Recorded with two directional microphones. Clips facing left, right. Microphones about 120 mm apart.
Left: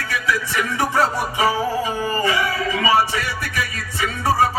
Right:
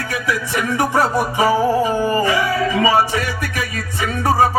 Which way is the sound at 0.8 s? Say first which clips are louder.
Right 3 dB; 45° right (ahead or behind).